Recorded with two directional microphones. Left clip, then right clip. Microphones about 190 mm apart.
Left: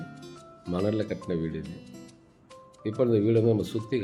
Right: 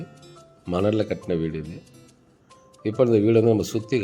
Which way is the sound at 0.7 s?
15° right (ahead or behind).